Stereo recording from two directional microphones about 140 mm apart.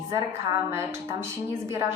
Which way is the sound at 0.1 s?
20° right (ahead or behind).